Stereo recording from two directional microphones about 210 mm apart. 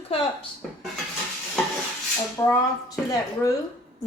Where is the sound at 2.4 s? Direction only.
15° left (ahead or behind).